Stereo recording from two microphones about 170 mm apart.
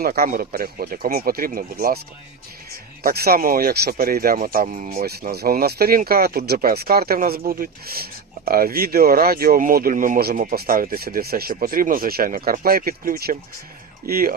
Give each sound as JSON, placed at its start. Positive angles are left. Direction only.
{"t": 0.0, "sound": "speech", "side_deg": -60}
{"t": 3.0, "sound": "speech", "side_deg": -60}
{"t": 5.3, "sound": "speech", "side_deg": -65}